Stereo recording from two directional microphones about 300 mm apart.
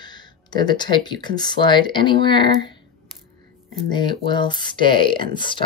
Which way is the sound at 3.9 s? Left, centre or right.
Centre.